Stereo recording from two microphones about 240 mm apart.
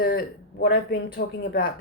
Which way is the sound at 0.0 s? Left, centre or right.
Left.